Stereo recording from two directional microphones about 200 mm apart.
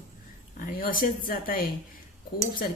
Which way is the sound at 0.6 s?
45° left (ahead or behind).